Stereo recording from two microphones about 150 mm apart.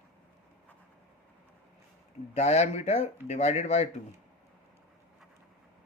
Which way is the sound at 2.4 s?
45° left (ahead or behind).